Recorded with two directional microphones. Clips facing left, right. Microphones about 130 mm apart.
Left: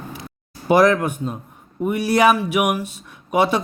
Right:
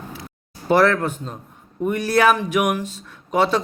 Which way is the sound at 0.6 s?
15° left (ahead or behind).